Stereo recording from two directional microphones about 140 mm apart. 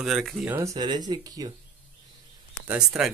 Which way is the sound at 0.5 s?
20° right (ahead or behind).